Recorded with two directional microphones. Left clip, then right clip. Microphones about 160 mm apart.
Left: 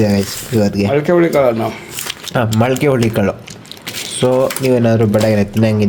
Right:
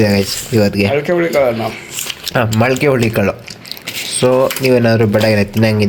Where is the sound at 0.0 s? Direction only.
5° left (ahead or behind).